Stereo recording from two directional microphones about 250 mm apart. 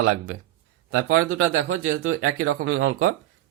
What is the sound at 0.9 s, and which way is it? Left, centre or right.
Speech, right.